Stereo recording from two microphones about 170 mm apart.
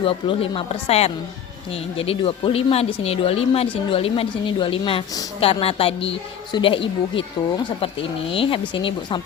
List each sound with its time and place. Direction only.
0.0 s speech: 30° left (ahead or behind)
8.3 s speech: 30° left (ahead or behind)